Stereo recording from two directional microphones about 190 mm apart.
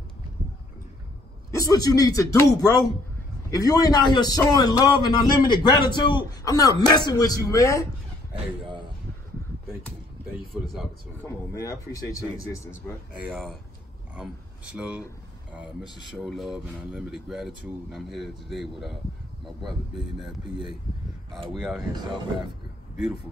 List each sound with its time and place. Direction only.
1.5 s a man's voice: 20° left (ahead or behind)
8.3 s a sound: 25° right (ahead or behind)
10.5 s speech: centre (ahead or behind)
11.6 s speech: 15° left (ahead or behind)
13.3 s speech: centre (ahead or behind)
16.2 s speech: centre (ahead or behind)
20.2 s speech: 25° right (ahead or behind)
21.5 s speech: 5° right (ahead or behind)